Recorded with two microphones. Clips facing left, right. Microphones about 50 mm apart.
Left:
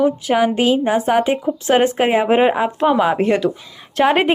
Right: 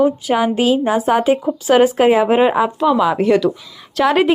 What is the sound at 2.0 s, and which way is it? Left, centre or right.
Speech, left.